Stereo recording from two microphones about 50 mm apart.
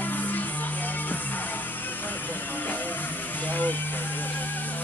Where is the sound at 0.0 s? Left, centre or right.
Left.